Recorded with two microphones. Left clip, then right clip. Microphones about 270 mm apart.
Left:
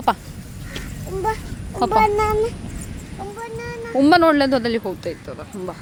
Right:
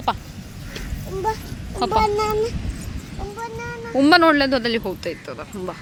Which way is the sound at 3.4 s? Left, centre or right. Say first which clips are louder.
Right 1 dB; left.